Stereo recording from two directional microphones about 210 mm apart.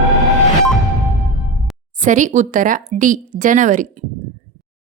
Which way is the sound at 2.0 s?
35° right (ahead or behind).